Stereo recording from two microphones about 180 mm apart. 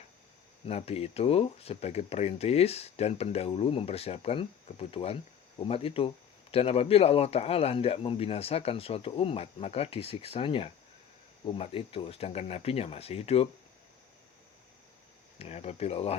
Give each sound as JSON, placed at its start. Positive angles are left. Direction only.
{"t": 0.6, "sound": "speech", "side_deg": 35}
{"t": 15.4, "sound": "speech", "side_deg": 35}